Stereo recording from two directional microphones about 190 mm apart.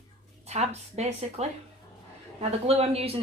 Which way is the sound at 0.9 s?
35° right (ahead or behind).